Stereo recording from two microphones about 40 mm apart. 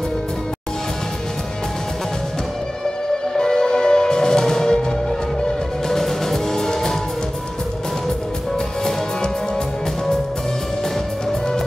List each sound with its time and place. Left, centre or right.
3.3 s music: centre
5.9 s music: centre